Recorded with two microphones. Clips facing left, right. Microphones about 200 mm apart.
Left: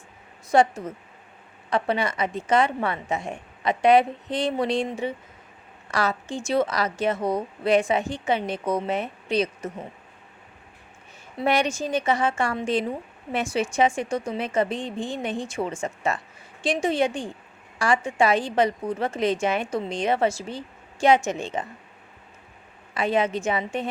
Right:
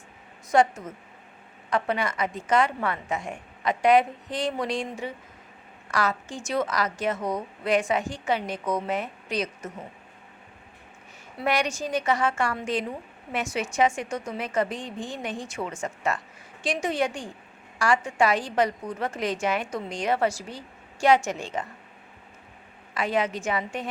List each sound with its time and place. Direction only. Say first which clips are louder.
0.5 s a woman's voice: left 2 dB; 30° left (ahead or behind)
11.3 s a woman's voice: left 3 dB; 25° left (ahead or behind)
23.0 s a woman's voice: left 3 dB; 25° left (ahead or behind)